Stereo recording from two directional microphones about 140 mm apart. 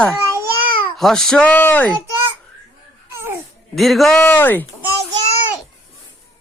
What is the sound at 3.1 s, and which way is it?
Babbling, 20° right (ahead or behind).